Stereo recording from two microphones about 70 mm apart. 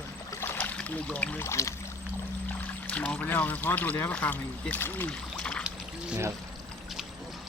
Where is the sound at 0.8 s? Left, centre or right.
Centre.